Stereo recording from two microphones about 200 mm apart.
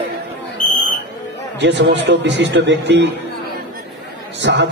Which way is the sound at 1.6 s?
60° right (ahead or behind).